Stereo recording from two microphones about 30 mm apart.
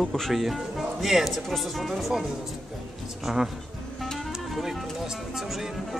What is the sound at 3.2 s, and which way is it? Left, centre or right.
Speech, centre.